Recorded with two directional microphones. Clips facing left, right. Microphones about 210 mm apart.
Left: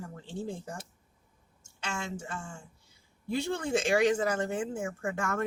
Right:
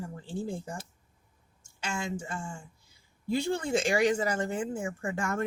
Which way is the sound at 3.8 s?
10° right (ahead or behind).